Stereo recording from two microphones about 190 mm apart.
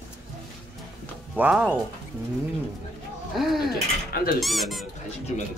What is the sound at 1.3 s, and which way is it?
Speech, 5° right (ahead or behind).